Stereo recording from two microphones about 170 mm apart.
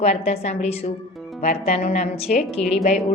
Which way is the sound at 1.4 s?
40° left (ahead or behind).